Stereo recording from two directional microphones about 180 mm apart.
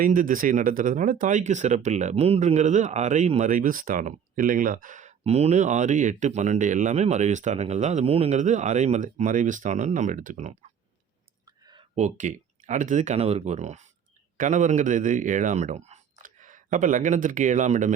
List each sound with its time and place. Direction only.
0.0 s speech: 50° right (ahead or behind)
11.4 s clicking: 25° right (ahead or behind)
11.9 s speech: 40° right (ahead or behind)